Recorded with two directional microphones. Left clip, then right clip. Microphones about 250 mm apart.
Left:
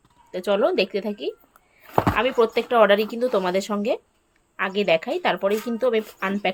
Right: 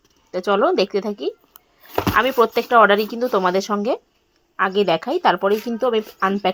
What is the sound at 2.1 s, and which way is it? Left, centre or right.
A woman's voice, centre.